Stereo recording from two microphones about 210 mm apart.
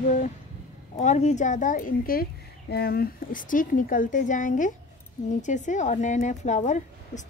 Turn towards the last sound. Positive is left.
turn(degrees=35)  # may be behind; listen again after turning